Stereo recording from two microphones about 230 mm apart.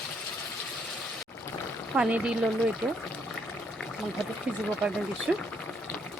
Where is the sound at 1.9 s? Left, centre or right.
Centre.